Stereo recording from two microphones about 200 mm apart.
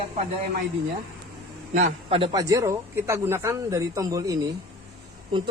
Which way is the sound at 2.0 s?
30° right (ahead or behind).